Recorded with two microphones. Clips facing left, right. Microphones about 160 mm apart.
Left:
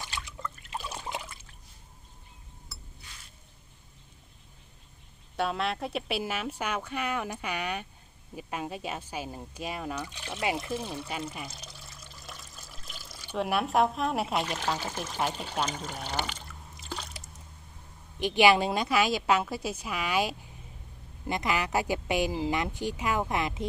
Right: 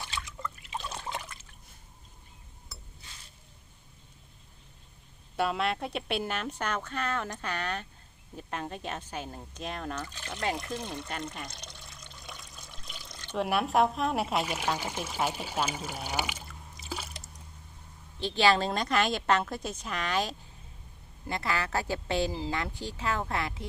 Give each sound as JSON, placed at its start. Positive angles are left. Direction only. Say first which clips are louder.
{"t": 0.1, "sound": "trickle", "louder": "even", "side_deg": 10}
{"t": 5.4, "sound": "speech", "louder": "right 1 dB", "side_deg": 0}
{"t": 16.5, "sound": "a sound", "louder": "even", "side_deg": -5}
{"t": 18.2, "sound": "speech", "louder": "left 3 dB", "side_deg": 15}